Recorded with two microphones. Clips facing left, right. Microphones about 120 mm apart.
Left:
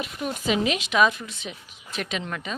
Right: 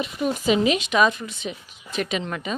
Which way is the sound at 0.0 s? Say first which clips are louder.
Right 5 dB; centre (ahead or behind).